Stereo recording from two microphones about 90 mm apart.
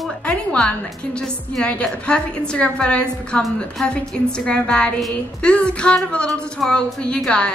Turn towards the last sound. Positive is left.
turn(degrees=10)  # may be behind; listen again after turning